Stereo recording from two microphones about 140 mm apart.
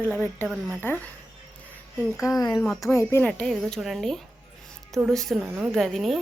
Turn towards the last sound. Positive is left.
turn(degrees=0)  # may be behind; listen again after turning